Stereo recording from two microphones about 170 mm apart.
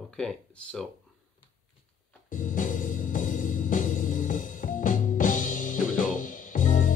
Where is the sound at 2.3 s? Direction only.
50° left (ahead or behind).